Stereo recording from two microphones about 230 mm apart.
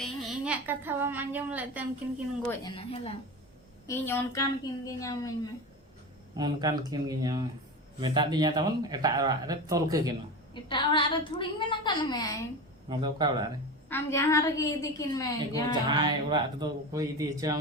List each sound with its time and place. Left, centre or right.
0.0 s a woman's voice: centre
2.5 s a woman's voice: left
3.8 s a woman's voice: centre
6.3 s speech: centre
10.5 s a woman's voice: left
12.9 s speech: centre
13.9 s a woman's voice: centre
15.7 s speech: centre